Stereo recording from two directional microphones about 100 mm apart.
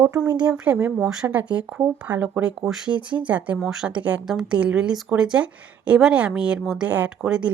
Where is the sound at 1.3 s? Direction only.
15° right (ahead or behind).